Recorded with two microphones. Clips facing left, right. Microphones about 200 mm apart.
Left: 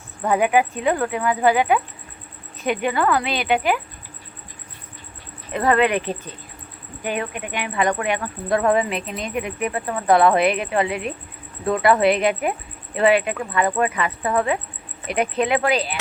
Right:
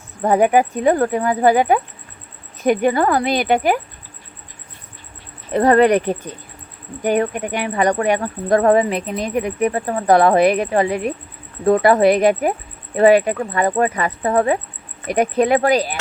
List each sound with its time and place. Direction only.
0.2 s speech: 40° right (ahead or behind)
5.5 s speech: 40° right (ahead or behind)
7.0 s speech: 45° right (ahead or behind)